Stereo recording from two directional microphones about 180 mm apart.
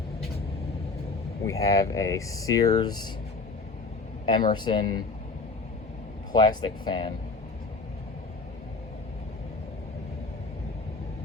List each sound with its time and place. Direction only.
1.5 s speech: 20° left (ahead or behind)
4.3 s speech: 25° left (ahead or behind)
6.3 s speech: 25° left (ahead or behind)